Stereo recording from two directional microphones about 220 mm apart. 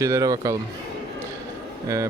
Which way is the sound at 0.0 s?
15° right (ahead or behind).